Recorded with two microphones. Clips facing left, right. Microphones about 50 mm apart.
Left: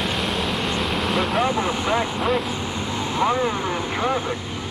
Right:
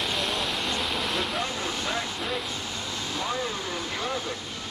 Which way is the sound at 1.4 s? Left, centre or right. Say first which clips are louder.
Left 9 dB; left.